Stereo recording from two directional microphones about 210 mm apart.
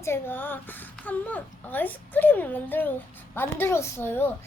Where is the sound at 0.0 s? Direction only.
10° left (ahead or behind).